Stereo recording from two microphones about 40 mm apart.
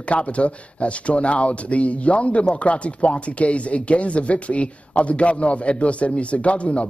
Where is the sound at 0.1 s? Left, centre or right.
Left.